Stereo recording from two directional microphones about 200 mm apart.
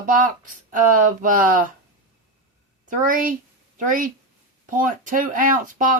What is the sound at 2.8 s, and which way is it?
Speech, 40° right (ahead or behind).